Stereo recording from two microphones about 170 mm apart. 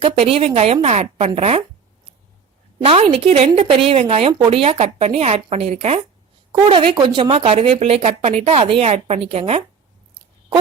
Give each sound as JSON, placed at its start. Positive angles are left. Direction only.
{"t": 0.0, "sound": "speech", "side_deg": -35}
{"t": 2.7, "sound": "speech", "side_deg": -35}